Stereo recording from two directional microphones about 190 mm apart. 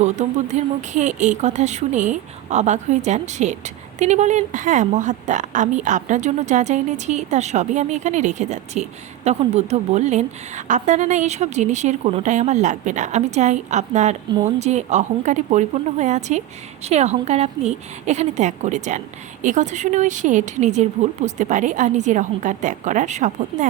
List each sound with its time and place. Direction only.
0.0 s speech: 35° right (ahead or behind)